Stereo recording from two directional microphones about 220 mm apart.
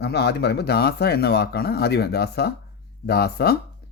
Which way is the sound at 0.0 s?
50° left (ahead or behind).